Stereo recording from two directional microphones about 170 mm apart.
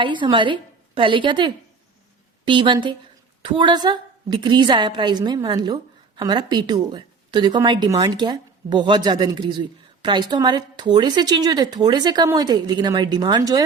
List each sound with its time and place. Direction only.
0.0 s a woman's voice: 30° right (ahead or behind)